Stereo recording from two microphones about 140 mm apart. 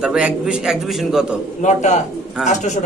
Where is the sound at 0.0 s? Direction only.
5° right (ahead or behind).